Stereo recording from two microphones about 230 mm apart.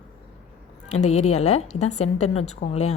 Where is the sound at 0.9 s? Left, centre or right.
Left.